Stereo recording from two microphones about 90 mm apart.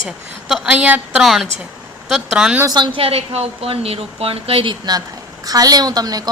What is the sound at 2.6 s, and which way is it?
Speech, 55° right (ahead or behind).